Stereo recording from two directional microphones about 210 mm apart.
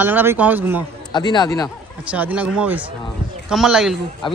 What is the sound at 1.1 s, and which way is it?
Speech, 20° left (ahead or behind).